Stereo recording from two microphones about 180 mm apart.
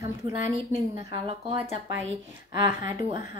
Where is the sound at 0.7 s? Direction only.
35° right (ahead or behind).